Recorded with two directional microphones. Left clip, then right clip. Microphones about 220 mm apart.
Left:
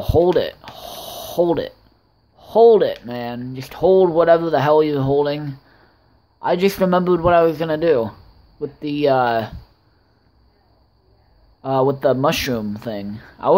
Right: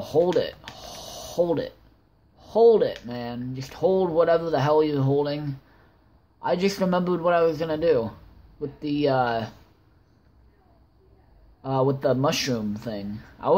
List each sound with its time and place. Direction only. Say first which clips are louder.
0.0 s a sound: left 6 dB; 20° left (ahead or behind)
2.3 s speech: left 6 dB; 25° left (ahead or behind)
11.6 s speech: left 6 dB; 25° left (ahead or behind)